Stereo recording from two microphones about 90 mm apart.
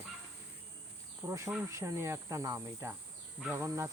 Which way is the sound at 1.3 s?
35° right (ahead or behind).